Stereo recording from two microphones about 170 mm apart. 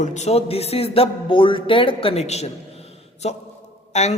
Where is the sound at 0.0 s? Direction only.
45° left (ahead or behind).